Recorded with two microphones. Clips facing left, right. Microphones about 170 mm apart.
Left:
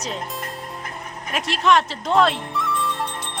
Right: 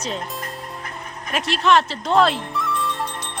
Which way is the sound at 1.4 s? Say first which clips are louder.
Right 1 dB; 30° right (ahead or behind).